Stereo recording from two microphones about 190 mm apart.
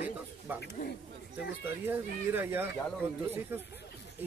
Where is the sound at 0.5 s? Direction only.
10° right (ahead or behind).